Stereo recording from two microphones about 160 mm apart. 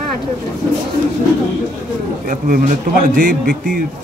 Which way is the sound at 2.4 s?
60° right (ahead or behind).